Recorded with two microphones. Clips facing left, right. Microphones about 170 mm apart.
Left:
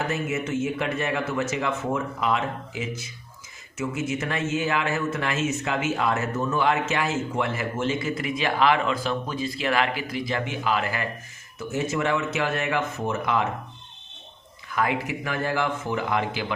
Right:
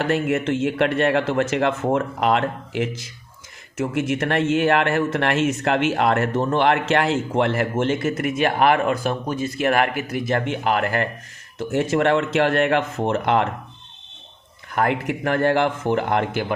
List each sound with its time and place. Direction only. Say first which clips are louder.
0.1 s speech: right 6 dB; 60° right (ahead or behind)
4.3 s speech: right 9 dB; 60° right (ahead or behind)
15.0 s speech: right 8 dB; 60° right (ahead or behind)